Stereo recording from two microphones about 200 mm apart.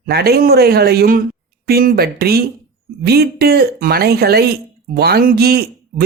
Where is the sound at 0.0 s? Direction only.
50° right (ahead or behind).